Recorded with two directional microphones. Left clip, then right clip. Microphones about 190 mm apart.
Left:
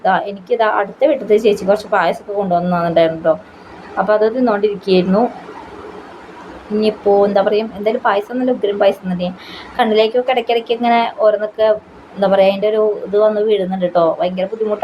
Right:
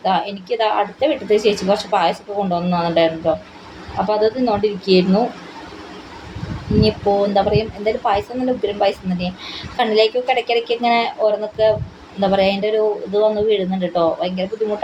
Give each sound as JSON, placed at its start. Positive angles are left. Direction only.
{"t": 0.0, "sound": "a woman's voice", "side_deg": 15}
{"t": 6.8, "sound": "a woman's voice", "side_deg": 15}